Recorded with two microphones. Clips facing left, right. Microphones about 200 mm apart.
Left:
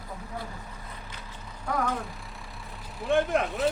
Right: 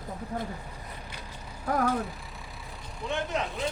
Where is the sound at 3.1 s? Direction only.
50° left (ahead or behind).